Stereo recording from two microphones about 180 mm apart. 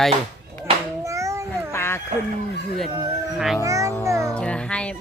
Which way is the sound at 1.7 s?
15° left (ahead or behind).